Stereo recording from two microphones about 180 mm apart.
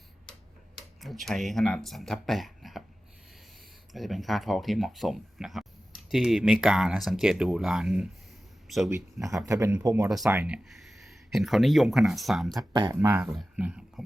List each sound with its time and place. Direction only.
0.8 s speech: centre (ahead or behind)
3.9 s speech: centre (ahead or behind)
8.9 s speech: 15° right (ahead or behind); by 12.6 s centre (ahead or behind)
12.7 s speech: 20° right (ahead or behind); by 14.0 s 5° right (ahead or behind)